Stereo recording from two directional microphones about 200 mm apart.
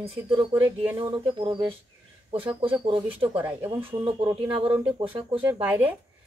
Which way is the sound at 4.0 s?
25° right (ahead or behind).